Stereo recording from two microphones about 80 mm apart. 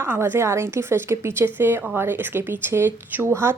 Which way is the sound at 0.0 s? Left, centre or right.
Right.